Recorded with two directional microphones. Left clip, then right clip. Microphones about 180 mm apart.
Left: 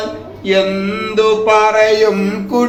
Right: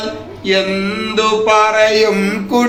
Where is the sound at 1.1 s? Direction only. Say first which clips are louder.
Left 1 dB; 5° left (ahead or behind).